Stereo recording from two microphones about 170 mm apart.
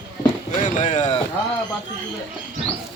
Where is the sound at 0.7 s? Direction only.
45° left (ahead or behind).